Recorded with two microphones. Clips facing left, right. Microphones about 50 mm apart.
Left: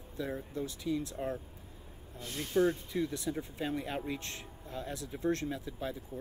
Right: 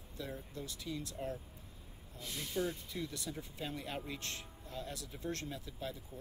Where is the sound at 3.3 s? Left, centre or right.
Left.